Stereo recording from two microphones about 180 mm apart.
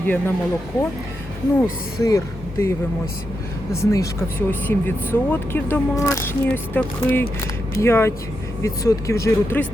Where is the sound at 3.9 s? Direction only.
15° left (ahead or behind).